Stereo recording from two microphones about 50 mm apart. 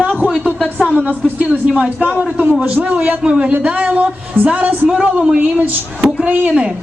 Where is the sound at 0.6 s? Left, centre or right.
Left.